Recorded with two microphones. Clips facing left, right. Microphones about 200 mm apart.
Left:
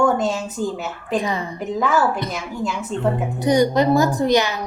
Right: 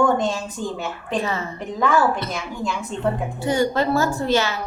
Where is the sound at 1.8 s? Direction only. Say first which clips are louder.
Right 1 dB; 5° left (ahead or behind).